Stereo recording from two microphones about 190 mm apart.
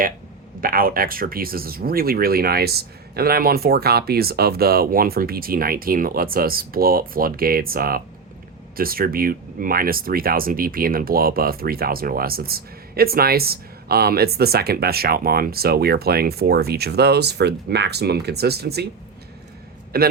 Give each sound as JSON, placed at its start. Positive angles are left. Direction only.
{"t": 0.6, "sound": "speech", "side_deg": -50}
{"t": 19.9, "sound": "speech", "side_deg": -55}